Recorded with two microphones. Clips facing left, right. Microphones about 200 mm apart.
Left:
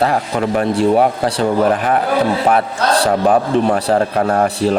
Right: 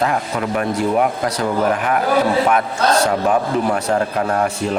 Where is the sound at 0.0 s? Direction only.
35° left (ahead or behind).